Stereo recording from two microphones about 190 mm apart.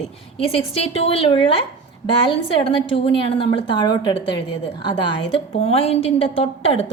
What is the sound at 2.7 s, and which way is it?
A woman's voice, 30° left (ahead or behind).